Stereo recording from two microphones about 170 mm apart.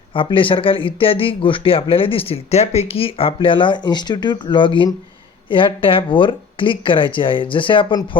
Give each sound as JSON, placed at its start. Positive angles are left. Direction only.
{"t": 0.1, "sound": "speech", "side_deg": 30}